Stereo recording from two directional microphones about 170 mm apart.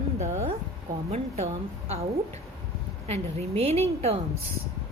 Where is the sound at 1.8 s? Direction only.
40° right (ahead or behind).